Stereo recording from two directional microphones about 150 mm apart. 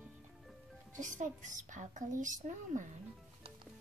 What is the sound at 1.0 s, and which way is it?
A child's voice, 55° right (ahead or behind).